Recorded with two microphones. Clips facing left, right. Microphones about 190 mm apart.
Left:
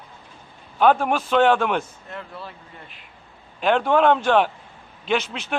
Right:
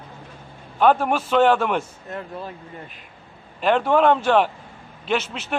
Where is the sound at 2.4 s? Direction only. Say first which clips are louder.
Right 5 dB; 45° right (ahead or behind).